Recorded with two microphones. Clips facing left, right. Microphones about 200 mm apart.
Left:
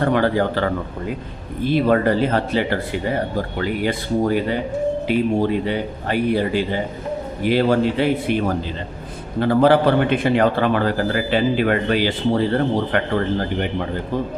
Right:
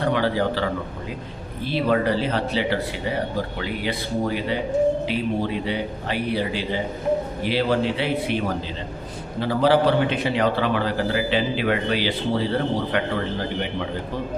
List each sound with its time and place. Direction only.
0.0 s a man's voice: 50° left (ahead or behind)
9.4 s a man's voice: 55° left (ahead or behind)